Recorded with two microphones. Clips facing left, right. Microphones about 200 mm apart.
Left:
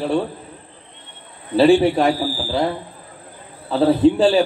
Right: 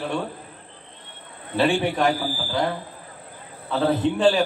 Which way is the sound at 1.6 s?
30° left (ahead or behind).